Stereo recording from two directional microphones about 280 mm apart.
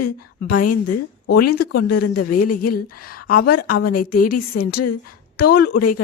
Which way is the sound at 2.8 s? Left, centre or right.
Left.